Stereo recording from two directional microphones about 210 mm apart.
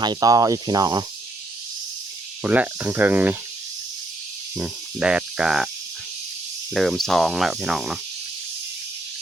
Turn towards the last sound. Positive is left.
turn(degrees=0)  # may be behind; listen again after turning